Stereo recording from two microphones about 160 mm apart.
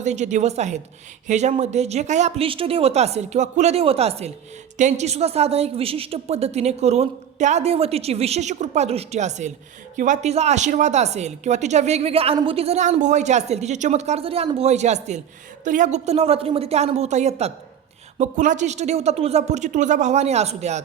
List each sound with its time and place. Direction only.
0.0 s a woman's voice: 45° right (ahead or behind)